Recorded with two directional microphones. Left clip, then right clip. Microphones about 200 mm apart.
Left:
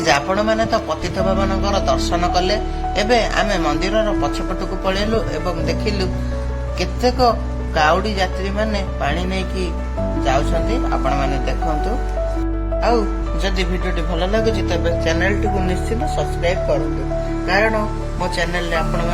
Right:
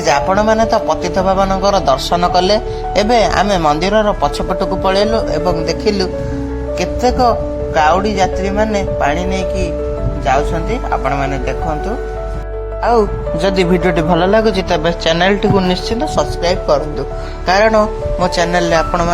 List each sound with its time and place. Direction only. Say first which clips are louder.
0.0 s speech: right 4 dB; 25° right (ahead or behind)
12.8 s speech: right 6 dB; 20° right (ahead or behind)
17.4 s speech: right 8 dB; 25° right (ahead or behind)